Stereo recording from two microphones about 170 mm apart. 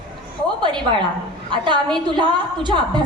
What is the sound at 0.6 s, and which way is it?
A woman's voice, 25° right (ahead or behind).